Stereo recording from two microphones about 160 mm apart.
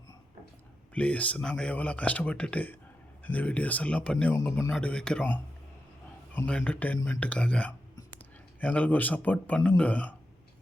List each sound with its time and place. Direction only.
0.9 s speech: 10° left (ahead or behind)
4.7 s speech: 5° left (ahead or behind)